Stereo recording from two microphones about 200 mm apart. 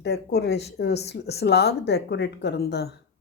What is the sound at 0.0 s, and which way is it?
Speech, 55° left (ahead or behind).